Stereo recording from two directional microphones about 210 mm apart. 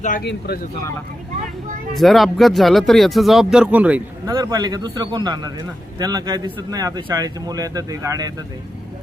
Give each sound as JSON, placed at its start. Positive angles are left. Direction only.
{"t": 0.0, "sound": "speech", "side_deg": 45}
{"t": 2.0, "sound": "speech", "side_deg": 0}
{"t": 4.3, "sound": "speech", "side_deg": -20}